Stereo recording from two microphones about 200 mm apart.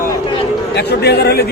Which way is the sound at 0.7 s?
55° left (ahead or behind).